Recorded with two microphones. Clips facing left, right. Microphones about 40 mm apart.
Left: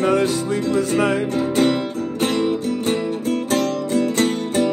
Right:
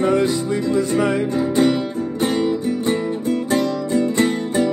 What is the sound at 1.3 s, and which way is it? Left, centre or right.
Music, left.